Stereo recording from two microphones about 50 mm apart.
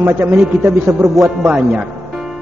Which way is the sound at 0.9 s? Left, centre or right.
Right.